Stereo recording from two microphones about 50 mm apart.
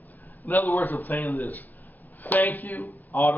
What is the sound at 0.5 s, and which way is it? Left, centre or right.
Speech, left.